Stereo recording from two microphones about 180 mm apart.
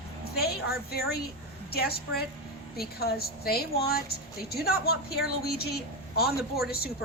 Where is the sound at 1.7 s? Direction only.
60° left (ahead or behind).